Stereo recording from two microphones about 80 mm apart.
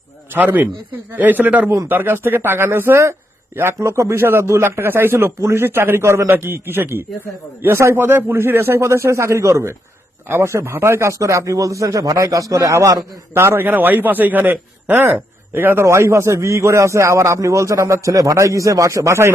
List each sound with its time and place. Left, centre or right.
0.3 s a man's voice: right
13.3 s a man's voice: right